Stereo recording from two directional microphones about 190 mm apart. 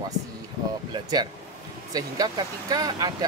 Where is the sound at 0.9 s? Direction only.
20° right (ahead or behind).